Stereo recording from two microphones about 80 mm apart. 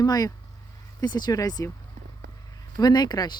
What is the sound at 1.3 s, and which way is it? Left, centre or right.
Speech, left.